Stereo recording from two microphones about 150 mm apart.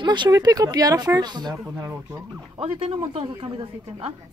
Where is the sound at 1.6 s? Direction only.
15° right (ahead or behind).